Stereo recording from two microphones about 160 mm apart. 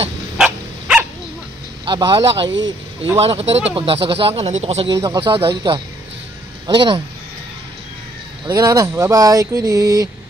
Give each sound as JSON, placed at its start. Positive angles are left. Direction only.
{"t": 0.4, "sound": "dog", "side_deg": -5}
{"t": 1.9, "sound": "speech", "side_deg": -30}
{"t": 4.9, "sound": "speech", "side_deg": -25}
{"t": 8.5, "sound": "speech", "side_deg": -25}